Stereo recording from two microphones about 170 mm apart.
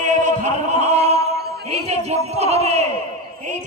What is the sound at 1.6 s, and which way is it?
Speech, 40° right (ahead or behind).